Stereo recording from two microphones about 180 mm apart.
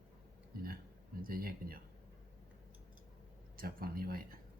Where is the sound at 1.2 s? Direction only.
55° right (ahead or behind).